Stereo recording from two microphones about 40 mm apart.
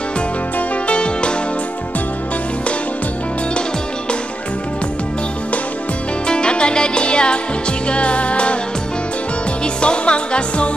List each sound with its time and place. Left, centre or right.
0.8 s music: left
6.2 s music: left
9.8 s music: left